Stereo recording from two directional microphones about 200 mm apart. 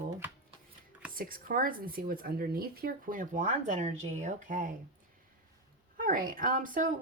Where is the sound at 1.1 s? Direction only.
45° right (ahead or behind).